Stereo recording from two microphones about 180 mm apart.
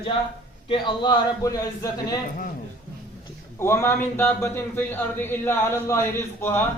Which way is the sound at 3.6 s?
15° left (ahead or behind).